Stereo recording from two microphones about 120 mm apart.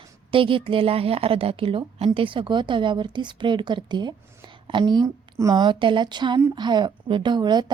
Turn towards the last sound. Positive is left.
turn(degrees=-35)  # may be behind; listen again after turning